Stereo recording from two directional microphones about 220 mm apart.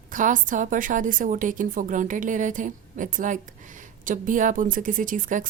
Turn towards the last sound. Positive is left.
turn(degrees=-35)  # may be behind; listen again after turning